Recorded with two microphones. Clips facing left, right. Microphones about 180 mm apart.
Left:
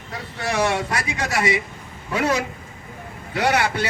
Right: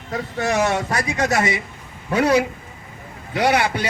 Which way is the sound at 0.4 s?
45° right (ahead or behind).